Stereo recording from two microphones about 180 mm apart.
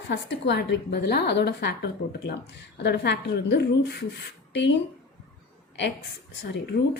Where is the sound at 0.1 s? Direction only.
80° left.